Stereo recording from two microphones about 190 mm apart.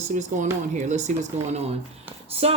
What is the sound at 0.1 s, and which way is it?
Speech, 40° right (ahead or behind).